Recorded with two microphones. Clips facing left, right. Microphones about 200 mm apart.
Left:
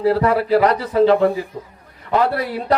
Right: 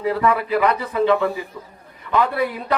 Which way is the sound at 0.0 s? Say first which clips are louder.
Left 4 dB; 35° left (ahead or behind).